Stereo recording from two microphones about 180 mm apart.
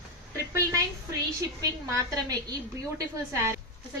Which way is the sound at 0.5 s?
15° right (ahead or behind).